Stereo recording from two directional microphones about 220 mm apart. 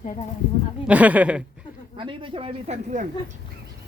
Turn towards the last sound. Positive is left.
turn(degrees=-30)  # may be behind; listen again after turning